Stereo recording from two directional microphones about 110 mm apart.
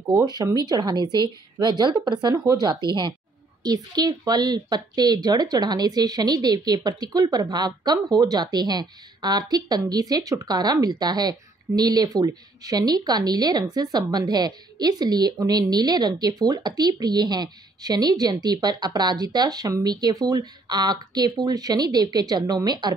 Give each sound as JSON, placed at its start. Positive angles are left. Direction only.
{"t": 0.1, "sound": "a woman's voice", "side_deg": -35}